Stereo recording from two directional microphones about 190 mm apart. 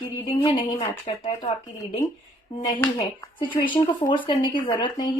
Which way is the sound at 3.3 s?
25° left (ahead or behind).